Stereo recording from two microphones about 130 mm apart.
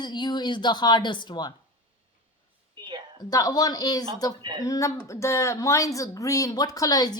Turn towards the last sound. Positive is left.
turn(degrees=30)  # may be behind; listen again after turning